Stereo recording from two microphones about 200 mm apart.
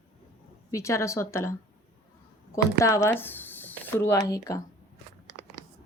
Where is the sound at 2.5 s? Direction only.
15° left (ahead or behind).